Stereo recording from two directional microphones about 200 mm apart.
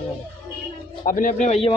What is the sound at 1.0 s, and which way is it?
Speech, 40° left (ahead or behind).